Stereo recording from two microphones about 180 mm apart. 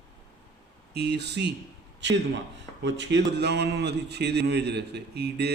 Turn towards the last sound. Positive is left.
turn(degrees=-65)  # may be behind; listen again after turning